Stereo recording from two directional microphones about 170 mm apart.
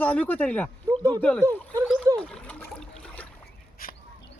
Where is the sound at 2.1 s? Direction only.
5° left (ahead or behind).